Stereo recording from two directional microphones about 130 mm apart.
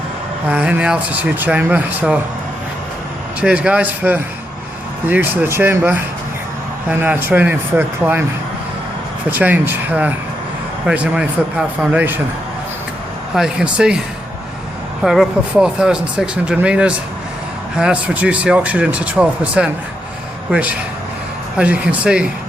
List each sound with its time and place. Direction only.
0.4 s speech: 10° right (ahead or behind)
3.4 s speech: 10° right (ahead or behind)
7.0 s speech: 15° right (ahead or behind)
9.3 s speech: 15° right (ahead or behind)
13.3 s speech: 5° right (ahead or behind)
15.0 s speech: 5° right (ahead or behind)